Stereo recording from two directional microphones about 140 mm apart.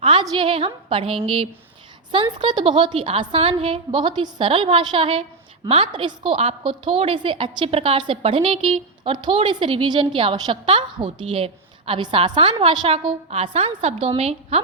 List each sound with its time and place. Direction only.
0.0 s a woman's voice: 35° right (ahead or behind)